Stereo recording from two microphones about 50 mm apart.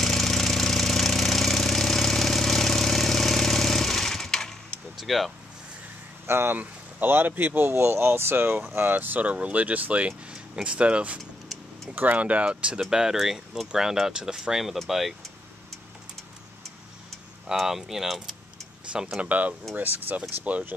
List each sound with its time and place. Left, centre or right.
0.0 s engine: centre
4.9 s a sound: centre
6.2 s speech: right
6.5 s speech: right
7.7 s speech: right
11.9 s speech: right
12.9 s speech: centre
17.5 s speech: centre
18.9 s speech: centre
19.2 s speech: right